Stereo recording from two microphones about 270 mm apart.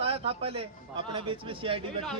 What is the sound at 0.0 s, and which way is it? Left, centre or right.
A man's voice, right.